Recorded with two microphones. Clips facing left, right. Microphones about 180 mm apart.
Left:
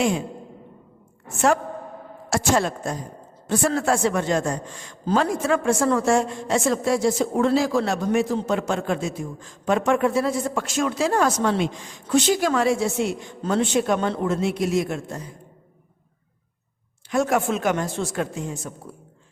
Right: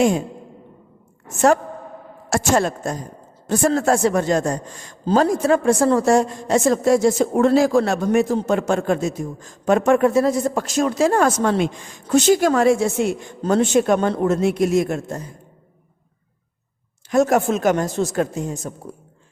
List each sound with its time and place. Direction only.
2.3 s a woman's voice: 45° right (ahead or behind)
17.1 s a woman's voice: 40° right (ahead or behind)